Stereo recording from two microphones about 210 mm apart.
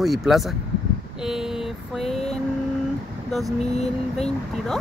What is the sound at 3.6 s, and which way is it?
Speech, 30° left (ahead or behind).